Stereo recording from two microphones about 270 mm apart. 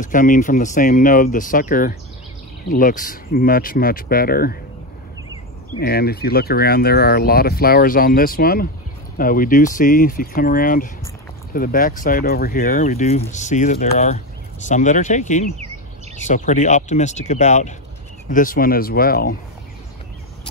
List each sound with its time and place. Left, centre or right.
0.0 s speech: left
5.8 s speech: left